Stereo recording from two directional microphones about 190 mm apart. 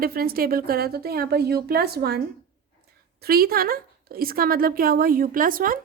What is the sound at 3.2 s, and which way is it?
A woman's voice, 50° right (ahead or behind).